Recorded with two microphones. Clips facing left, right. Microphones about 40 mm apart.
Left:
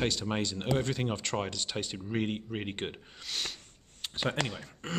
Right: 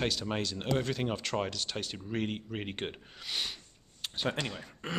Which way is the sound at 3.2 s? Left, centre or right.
Centre.